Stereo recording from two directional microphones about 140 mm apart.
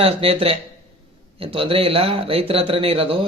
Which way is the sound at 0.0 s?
45° right (ahead or behind).